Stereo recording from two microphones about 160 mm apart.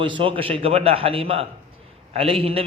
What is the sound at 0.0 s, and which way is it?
A man's voice, 30° right (ahead or behind).